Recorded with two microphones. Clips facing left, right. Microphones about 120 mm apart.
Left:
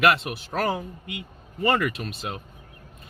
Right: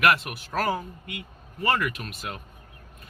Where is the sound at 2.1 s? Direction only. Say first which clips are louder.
Left 3 dB; 25° left (ahead or behind).